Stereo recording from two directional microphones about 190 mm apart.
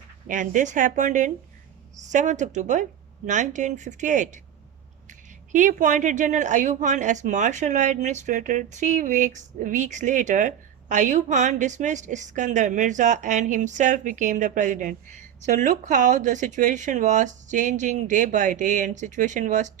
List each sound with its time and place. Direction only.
0.3 s a woman's voice: 40° right (ahead or behind)